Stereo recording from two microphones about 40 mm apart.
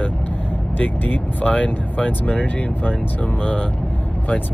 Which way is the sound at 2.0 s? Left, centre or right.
Left.